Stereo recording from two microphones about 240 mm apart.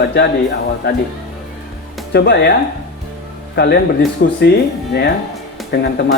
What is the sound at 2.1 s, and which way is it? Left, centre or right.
Speech, left.